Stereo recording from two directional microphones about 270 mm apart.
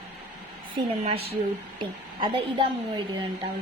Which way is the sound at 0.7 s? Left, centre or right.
Right.